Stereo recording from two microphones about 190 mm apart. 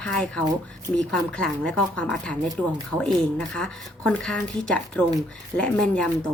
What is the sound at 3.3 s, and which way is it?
Speech, 5° left (ahead or behind).